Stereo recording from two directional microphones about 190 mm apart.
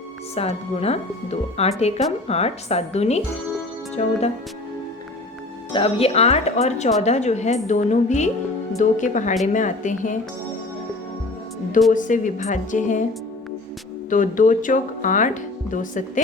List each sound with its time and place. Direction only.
0.3 s speech: 35° left (ahead or behind)
5.7 s speech: 30° left (ahead or behind)
11.9 s speech: 45° left (ahead or behind)
14.1 s speech: 45° left (ahead or behind)